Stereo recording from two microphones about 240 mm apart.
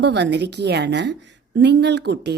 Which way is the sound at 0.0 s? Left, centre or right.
Right.